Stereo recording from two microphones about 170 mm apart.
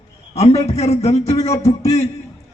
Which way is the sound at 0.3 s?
40° left (ahead or behind).